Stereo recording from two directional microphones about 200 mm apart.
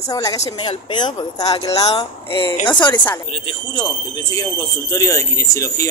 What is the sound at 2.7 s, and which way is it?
Speech, 20° left (ahead or behind).